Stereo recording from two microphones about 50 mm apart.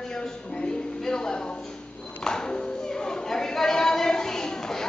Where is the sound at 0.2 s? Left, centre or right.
Centre.